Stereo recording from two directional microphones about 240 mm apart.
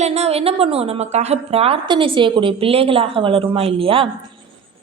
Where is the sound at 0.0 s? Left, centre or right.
Right.